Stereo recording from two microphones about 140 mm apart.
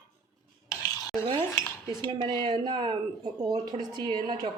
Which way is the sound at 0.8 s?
25° left (ahead or behind).